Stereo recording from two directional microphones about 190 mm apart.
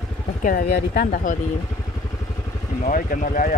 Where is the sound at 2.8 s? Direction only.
45° left (ahead or behind).